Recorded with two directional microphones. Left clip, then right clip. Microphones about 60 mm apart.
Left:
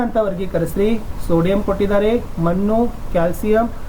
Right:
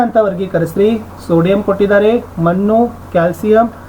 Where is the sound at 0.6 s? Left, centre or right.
Left.